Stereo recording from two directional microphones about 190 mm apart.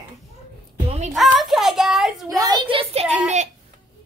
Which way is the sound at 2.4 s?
25° right (ahead or behind).